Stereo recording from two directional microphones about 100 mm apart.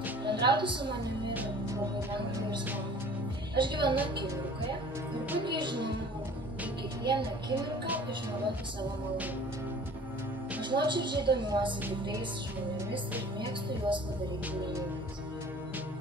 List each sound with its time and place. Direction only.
0.2 s a woman's voice: 50° right (ahead or behind)
3.5 s a woman's voice: 50° right (ahead or behind)
5.4 s a woman's voice: 50° right (ahead or behind)
7.1 s a woman's voice: 50° right (ahead or behind)
10.6 s a woman's voice: 50° right (ahead or behind)
13.7 s speech: 55° right (ahead or behind)